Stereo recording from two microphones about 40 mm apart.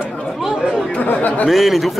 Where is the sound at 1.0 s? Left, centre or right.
Left.